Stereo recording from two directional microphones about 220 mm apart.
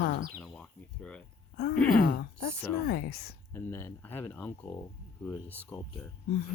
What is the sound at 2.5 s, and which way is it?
Speech, 10° left (ahead or behind).